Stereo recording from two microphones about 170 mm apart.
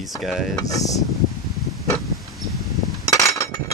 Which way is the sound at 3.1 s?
20° left (ahead or behind).